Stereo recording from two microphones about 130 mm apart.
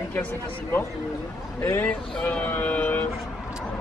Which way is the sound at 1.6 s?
15° left (ahead or behind).